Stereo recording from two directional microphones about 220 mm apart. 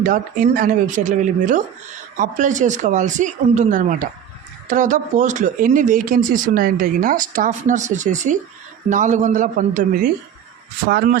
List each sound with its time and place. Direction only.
0.0 s speech: 35° right (ahead or behind)